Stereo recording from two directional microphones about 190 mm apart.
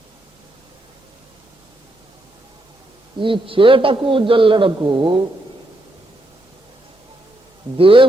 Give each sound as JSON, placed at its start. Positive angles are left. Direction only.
{"t": 3.2, "sound": "a man's voice", "side_deg": -25}
{"t": 7.8, "sound": "a man's voice", "side_deg": -30}